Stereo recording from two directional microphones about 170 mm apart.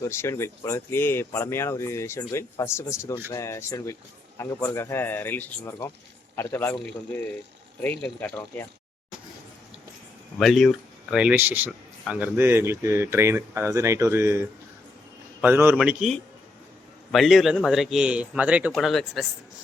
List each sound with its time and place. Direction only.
0.0 s speech: 15° left (ahead or behind)
10.3 s a man's voice: centre (ahead or behind)